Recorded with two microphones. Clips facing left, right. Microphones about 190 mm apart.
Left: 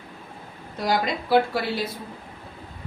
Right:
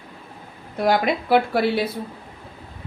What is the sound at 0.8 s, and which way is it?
Speech, 60° right (ahead or behind).